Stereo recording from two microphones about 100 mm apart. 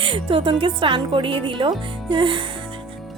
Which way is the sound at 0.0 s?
60° right (ahead or behind).